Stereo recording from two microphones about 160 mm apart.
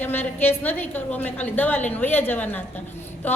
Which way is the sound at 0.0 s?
10° left (ahead or behind).